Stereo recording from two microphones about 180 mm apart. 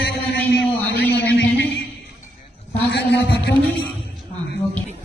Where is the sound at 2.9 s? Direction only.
65° left (ahead or behind).